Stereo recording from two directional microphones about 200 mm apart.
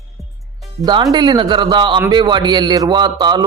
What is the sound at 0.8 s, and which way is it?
A man's voice, 20° right (ahead or behind).